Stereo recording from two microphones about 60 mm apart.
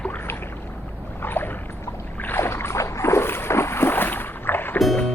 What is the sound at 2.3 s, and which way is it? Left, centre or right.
Boat, left.